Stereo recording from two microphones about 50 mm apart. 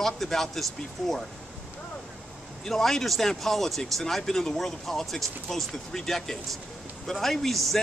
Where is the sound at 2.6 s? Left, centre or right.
Centre.